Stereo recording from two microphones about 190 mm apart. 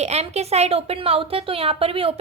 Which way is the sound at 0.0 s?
35° right (ahead or behind).